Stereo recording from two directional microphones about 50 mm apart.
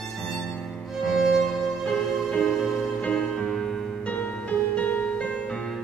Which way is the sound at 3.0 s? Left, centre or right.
Left.